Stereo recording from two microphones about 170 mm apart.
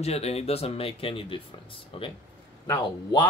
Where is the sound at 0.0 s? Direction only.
35° left (ahead or behind).